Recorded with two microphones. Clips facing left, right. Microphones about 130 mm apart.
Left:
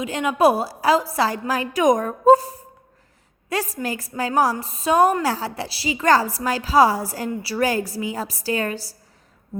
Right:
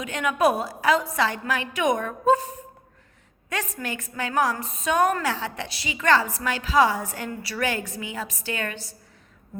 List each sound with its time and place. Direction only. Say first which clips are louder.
0.0 s a woman's voice: left 4 dB; 30° left (ahead or behind)